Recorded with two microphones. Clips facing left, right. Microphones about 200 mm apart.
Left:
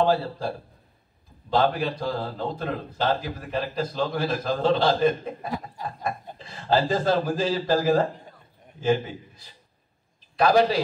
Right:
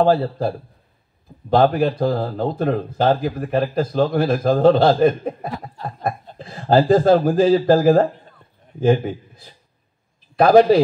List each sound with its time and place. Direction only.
0.0 s a man's voice: 55° right (ahead or behind)
1.5 s speech: 55° right (ahead or behind)
5.8 s snicker: 15° left (ahead or behind)
6.3 s a man's voice: 50° right (ahead or behind)